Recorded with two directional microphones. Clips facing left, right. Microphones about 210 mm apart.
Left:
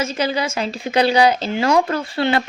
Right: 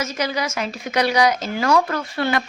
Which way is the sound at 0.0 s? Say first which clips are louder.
Left 3 dB; 30° left (ahead or behind).